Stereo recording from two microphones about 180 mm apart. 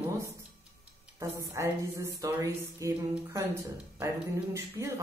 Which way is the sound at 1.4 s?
15° right (ahead or behind).